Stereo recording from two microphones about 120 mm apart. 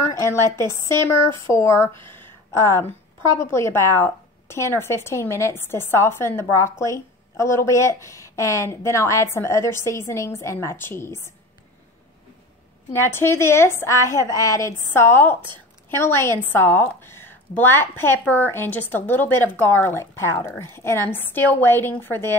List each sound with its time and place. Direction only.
0.1 s a woman's voice: 25° left (ahead or behind)
2.0 s a sound: 20° left (ahead or behind)
3.3 s a woman's voice: 20° left (ahead or behind)
12.9 s a woman's voice: 20° left (ahead or behind)